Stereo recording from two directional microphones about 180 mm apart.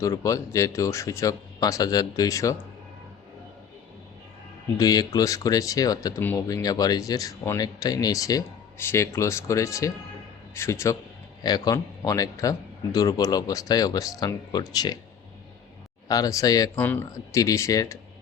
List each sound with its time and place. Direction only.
0.0 s speech: 15° left (ahead or behind)
4.8 s speech: 20° left (ahead or behind)
16.0 s speech: 20° left (ahead or behind)